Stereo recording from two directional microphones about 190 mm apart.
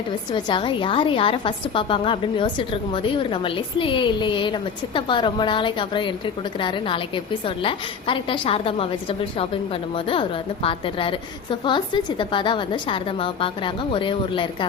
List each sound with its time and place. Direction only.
0.3 s a woman's voice: 25° left (ahead or behind)